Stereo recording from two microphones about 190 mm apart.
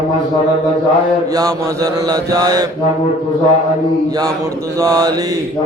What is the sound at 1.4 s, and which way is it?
Mantra, 20° right (ahead or behind).